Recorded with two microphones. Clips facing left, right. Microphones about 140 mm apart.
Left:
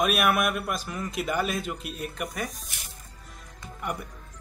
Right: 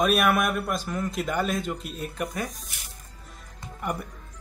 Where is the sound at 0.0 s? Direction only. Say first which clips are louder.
Right 2 dB; 5° left (ahead or behind).